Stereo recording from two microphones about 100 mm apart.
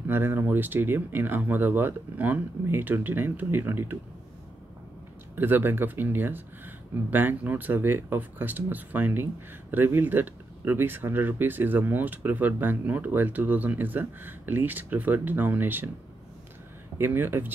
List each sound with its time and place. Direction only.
0.1 s speech: 20° right (ahead or behind)
5.3 s speech: 20° right (ahead or behind)
17.0 s speech: 20° right (ahead or behind)